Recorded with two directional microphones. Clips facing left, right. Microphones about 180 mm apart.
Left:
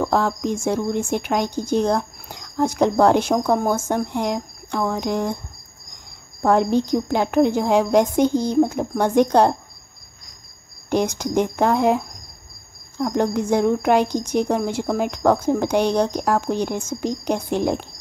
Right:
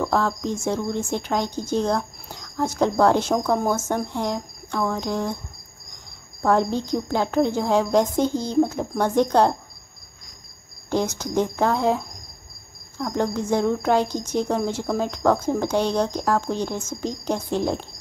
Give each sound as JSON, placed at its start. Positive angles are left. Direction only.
{"t": 0.0, "sound": "speech", "side_deg": 15}
{"t": 6.4, "sound": "speech", "side_deg": 15}
{"t": 10.9, "sound": "speech", "side_deg": 15}